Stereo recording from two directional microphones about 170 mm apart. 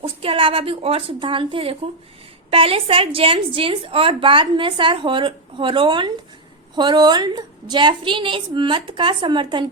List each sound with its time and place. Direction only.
0.0 s a woman's voice: 35° right (ahead or behind)